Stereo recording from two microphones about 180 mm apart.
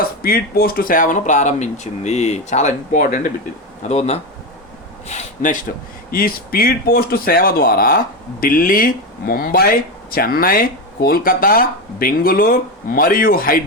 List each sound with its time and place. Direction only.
0.0 s speech: 55° left (ahead or behind)